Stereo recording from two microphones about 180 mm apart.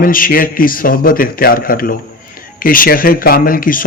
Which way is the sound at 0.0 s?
50° left (ahead or behind).